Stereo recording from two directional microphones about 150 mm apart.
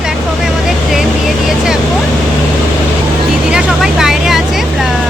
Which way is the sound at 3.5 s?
5° right (ahead or behind).